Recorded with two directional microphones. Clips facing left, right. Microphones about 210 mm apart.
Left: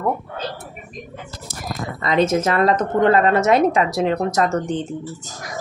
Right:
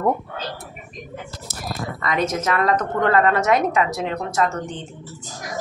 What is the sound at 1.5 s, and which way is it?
Speech, 15° left (ahead or behind).